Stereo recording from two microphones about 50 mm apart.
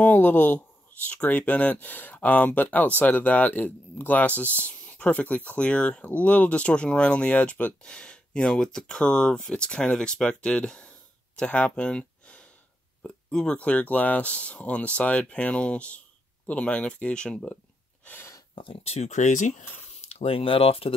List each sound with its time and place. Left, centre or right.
0.0 s speech: left
7.8 s speech: centre
13.6 s speech: left